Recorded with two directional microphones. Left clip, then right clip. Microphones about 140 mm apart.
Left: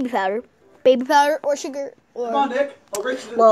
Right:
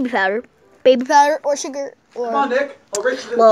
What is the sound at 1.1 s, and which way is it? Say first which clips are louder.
A child's voice: right 3 dB; 20° left (ahead or behind).